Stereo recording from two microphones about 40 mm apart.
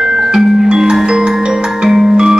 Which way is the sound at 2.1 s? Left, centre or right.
Centre.